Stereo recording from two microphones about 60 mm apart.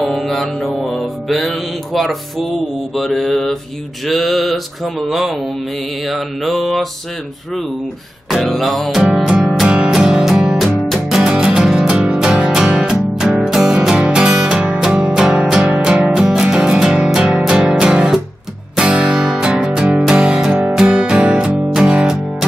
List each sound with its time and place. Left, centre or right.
0.0 s mantra: centre
8.3 s mantra: centre
9.2 s music: centre